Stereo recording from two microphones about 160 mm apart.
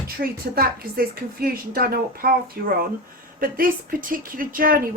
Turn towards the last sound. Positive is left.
turn(degrees=-60)  # may be behind; listen again after turning